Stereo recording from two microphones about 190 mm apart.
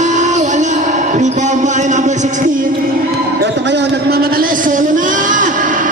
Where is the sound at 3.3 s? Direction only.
65° right (ahead or behind).